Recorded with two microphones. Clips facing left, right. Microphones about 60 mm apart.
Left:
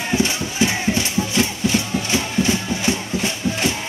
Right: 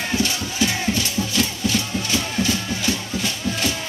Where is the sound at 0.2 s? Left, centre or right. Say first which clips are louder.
Left 3 dB; left.